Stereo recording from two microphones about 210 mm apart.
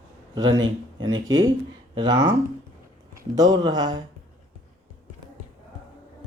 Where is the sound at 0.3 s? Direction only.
20° right (ahead or behind).